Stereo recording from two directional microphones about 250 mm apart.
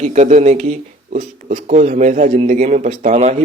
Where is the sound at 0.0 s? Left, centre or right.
Right.